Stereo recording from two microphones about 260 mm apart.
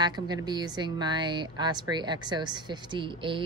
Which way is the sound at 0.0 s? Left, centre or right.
Centre.